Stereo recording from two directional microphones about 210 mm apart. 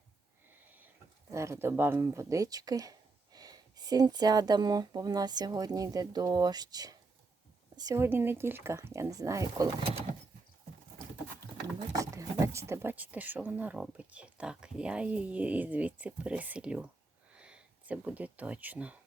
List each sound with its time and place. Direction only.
1.3 s speech: 15° right (ahead or behind)
11.9 s speech: 15° right (ahead or behind)